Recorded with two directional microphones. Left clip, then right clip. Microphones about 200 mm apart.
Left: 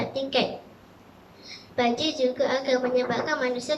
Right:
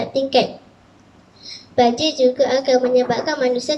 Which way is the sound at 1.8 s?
25° right (ahead or behind).